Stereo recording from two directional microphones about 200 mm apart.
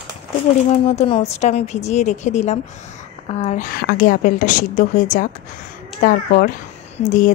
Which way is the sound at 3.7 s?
50° left (ahead or behind).